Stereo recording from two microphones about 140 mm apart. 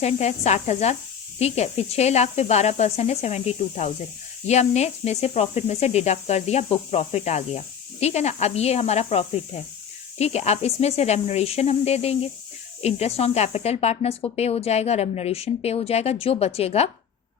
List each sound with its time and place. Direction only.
0.0 s speech: 50° left (ahead or behind)